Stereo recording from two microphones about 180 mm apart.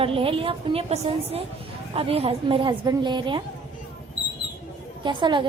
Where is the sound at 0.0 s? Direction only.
30° right (ahead or behind).